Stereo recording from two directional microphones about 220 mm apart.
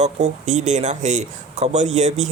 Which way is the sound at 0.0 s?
30° right (ahead or behind).